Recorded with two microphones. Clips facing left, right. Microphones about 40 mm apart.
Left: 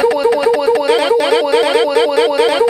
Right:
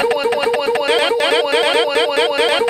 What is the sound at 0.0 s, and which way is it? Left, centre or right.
Music, right.